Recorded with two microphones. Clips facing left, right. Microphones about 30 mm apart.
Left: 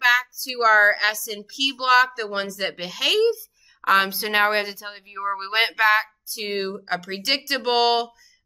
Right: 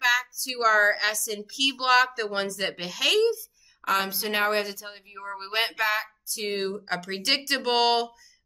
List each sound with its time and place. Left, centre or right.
0.0 s a woman's voice: centre
3.8 s speech: left
6.5 s a woman's voice: centre